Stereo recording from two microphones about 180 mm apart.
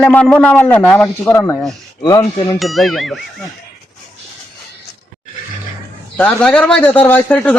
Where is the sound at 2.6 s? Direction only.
Centre (ahead or behind).